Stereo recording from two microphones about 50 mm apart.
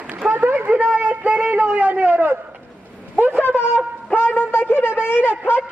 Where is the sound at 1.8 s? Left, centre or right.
Right.